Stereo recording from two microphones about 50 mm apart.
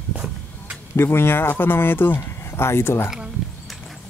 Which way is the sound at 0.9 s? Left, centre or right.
Left.